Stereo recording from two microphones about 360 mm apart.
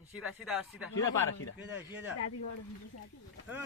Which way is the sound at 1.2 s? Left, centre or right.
Left.